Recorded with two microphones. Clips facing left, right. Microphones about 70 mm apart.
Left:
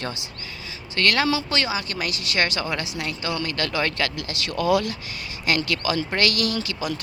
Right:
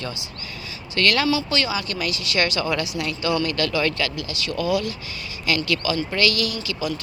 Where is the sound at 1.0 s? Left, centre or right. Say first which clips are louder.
Right 1 dB; left.